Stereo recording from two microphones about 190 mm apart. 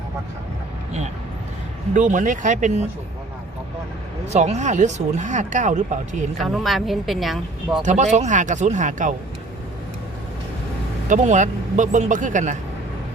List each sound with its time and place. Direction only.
2.0 s speech: 40° right (ahead or behind)
4.3 s speech: 35° right (ahead or behind)
6.4 s a woman's voice: centre (ahead or behind)
7.9 s speech: 40° right (ahead or behind)
11.1 s speech: 40° right (ahead or behind)